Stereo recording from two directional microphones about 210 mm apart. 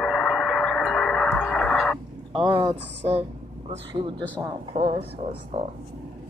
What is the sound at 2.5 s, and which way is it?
Speech, 25° right (ahead or behind).